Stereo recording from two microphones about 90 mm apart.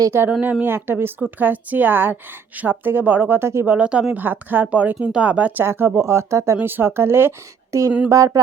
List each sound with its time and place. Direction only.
0.3 s speech: 15° right (ahead or behind)
3.8 s speech: 15° right (ahead or behind); by 7.9 s 35° right (ahead or behind)
8.1 s a sound: 40° right (ahead or behind)